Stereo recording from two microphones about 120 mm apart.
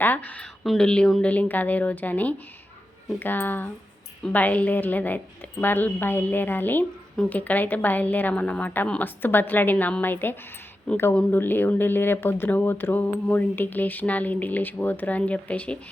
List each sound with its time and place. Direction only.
0.0 s speech: 15° left (ahead or behind)